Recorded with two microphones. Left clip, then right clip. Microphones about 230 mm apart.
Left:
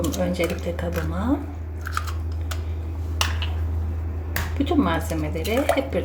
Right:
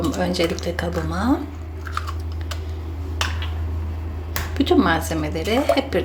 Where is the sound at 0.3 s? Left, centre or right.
Centre.